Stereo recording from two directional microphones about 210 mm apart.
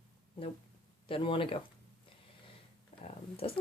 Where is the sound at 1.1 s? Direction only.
25° left (ahead or behind).